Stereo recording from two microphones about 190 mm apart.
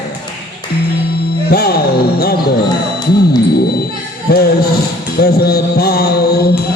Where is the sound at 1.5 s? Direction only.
55° left (ahead or behind).